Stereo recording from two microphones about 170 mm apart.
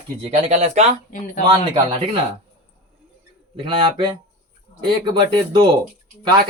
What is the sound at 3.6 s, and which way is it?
Speech, 25° right (ahead or behind).